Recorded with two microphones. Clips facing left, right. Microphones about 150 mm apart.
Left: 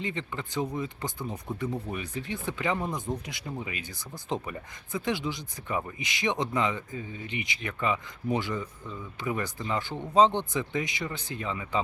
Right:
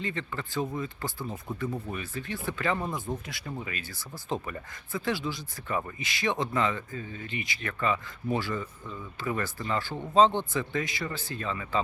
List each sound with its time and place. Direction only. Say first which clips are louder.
0.0 s speech: even; 20° left (ahead or behind)